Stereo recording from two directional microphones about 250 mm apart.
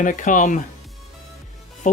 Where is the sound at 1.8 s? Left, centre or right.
Left.